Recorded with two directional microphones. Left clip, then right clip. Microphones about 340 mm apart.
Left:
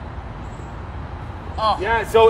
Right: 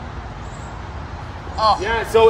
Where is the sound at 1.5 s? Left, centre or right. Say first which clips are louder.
Right 2 dB; centre.